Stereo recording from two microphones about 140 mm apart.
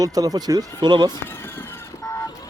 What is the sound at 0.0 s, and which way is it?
Speech, 25° right (ahead or behind).